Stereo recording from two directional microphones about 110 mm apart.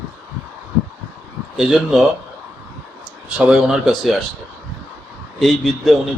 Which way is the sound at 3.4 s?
10° right (ahead or behind).